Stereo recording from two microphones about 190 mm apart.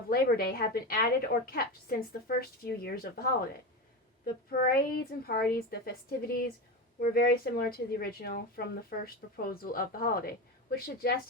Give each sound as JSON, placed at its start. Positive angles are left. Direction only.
{"t": 0.1, "sound": "a woman's voice", "side_deg": 55}
{"t": 4.5, "sound": "a woman's voice", "side_deg": 55}